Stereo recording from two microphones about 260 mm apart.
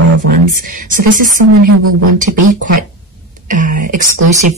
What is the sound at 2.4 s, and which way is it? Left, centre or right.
Speech, right.